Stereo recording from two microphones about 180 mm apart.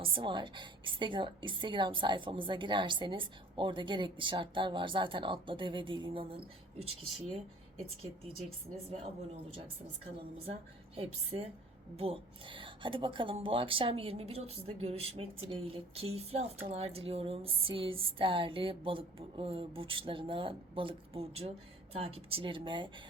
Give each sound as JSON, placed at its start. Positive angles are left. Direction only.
{"t": 0.0, "sound": "a woman's voice", "side_deg": -30}
{"t": 8.9, "sound": "a woman's voice", "side_deg": -35}
{"t": 10.9, "sound": "a woman's voice", "side_deg": -30}